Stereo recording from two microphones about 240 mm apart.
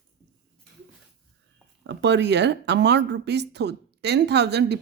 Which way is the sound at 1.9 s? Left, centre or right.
Right.